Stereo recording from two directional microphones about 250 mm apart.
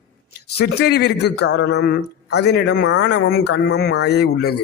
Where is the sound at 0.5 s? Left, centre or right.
Left.